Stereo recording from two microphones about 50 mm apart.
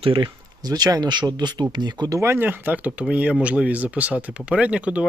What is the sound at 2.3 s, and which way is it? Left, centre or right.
A man's voice, right.